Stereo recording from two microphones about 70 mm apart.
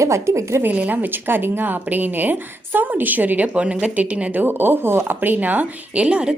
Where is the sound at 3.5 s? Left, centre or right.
Centre.